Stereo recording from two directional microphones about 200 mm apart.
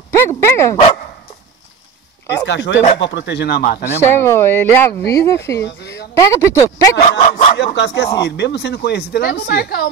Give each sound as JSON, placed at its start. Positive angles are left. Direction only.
{"t": 0.1, "sound": "dog", "side_deg": 15}
{"t": 2.4, "sound": "speech", "side_deg": 60}
{"t": 2.8, "sound": "speech", "side_deg": 30}
{"t": 3.1, "sound": "speech", "side_deg": 60}
{"t": 4.1, "sound": "speech", "side_deg": 15}
{"t": 7.1, "sound": "speech", "side_deg": 35}
{"t": 7.5, "sound": "speech", "side_deg": 60}